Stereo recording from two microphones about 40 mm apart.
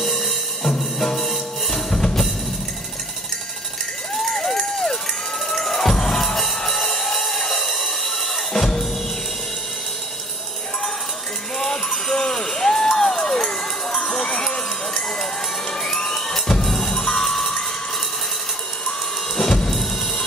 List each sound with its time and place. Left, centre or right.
0.0 s music: centre
4.1 s run: centre
5.5 s music: centre
11.5 s music: centre
12.8 s crowd: centre
15.8 s music: centre
19.3 s drum kit: centre
19.7 s drum: centre